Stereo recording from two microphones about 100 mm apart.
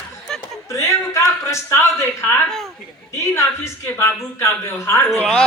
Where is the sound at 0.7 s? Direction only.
30° left (ahead or behind).